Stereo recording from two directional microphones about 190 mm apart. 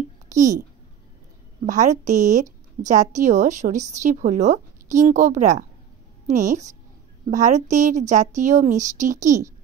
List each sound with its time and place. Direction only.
0.3 s a child's voice: 40° right (ahead or behind)
1.7 s a woman's voice: 40° right (ahead or behind)
7.2 s a woman's voice: 40° right (ahead or behind)